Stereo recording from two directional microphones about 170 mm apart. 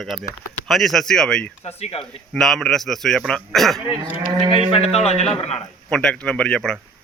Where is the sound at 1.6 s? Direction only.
35° left (ahead or behind).